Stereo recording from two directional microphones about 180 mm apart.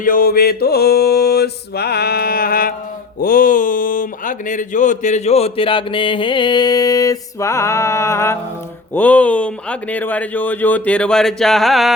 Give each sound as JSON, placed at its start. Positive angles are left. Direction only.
{"t": 0.0, "sound": "mantra", "side_deg": 50}
{"t": 3.2, "sound": "speech", "side_deg": 50}